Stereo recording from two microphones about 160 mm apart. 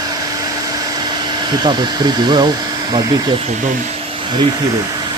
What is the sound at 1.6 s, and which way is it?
Speech, 25° right (ahead or behind).